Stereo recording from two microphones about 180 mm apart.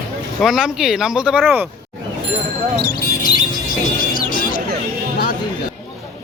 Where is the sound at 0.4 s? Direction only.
5° right (ahead or behind).